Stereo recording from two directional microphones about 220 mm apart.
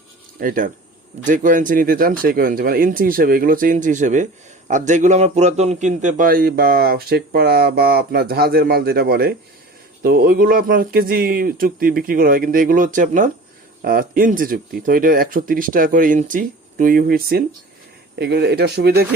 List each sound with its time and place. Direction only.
0.3 s a man's voice: 40° right (ahead or behind)